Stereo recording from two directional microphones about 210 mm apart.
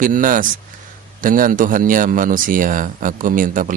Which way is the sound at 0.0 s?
40° right (ahead or behind).